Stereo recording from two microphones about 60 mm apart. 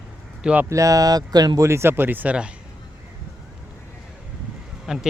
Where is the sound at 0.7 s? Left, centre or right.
Right.